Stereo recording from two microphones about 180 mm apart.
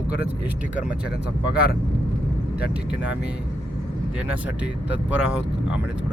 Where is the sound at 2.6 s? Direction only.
60° left (ahead or behind).